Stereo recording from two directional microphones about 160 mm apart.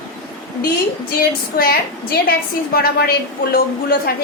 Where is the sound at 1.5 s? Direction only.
70° left (ahead or behind).